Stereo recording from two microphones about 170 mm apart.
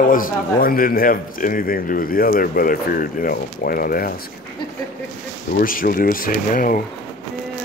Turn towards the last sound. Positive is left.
turn(degrees=55)  # may be behind; listen again after turning